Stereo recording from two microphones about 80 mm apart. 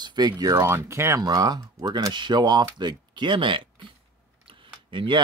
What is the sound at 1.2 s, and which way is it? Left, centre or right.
Speech, right.